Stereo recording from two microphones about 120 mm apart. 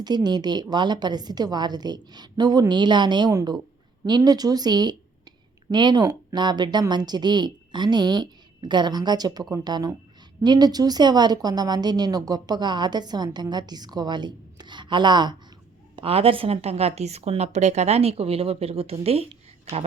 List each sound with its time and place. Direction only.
0.0 s a woman's voice: 35° right (ahead or behind)
16.0 s a woman's voice: 55° right (ahead or behind)